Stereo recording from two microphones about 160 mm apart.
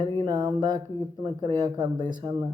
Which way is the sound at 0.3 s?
25° right (ahead or behind).